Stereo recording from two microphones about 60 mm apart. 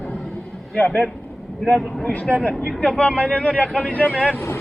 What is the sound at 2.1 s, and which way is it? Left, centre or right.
Speech, centre.